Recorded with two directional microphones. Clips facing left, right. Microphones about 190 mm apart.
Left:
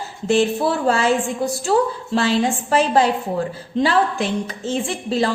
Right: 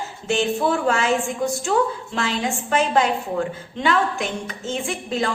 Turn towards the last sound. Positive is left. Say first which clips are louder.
# left 4 dB
turn(degrees=35)  # may be behind; listen again after turning